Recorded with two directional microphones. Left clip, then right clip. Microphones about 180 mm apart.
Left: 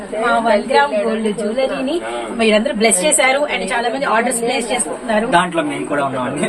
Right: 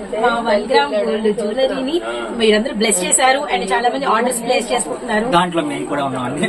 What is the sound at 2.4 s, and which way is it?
A woman's voice, 15° left (ahead or behind).